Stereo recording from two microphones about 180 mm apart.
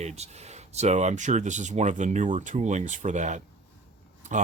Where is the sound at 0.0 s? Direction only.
35° right (ahead or behind).